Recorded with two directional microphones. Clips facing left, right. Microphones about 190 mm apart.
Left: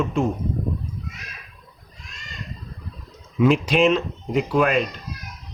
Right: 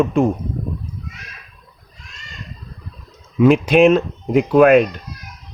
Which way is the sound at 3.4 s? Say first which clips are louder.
Right 6 dB; 55° right (ahead or behind).